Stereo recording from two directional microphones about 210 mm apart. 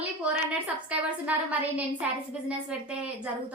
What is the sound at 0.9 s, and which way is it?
A woman's voice, 5° right (ahead or behind).